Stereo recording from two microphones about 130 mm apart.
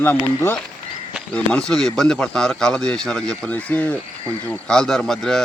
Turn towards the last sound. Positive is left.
turn(degrees=5)  # may be behind; listen again after turning